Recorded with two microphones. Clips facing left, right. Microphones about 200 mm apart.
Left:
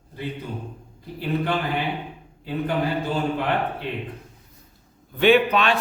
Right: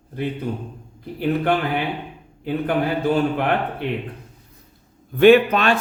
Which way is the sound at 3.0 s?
60° right (ahead or behind).